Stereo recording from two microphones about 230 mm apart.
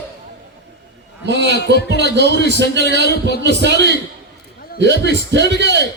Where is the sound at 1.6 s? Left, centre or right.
Left.